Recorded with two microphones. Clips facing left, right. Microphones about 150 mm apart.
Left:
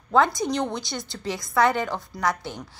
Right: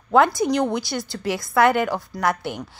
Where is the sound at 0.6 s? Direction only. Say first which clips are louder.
Right 5 dB; 5° right (ahead or behind).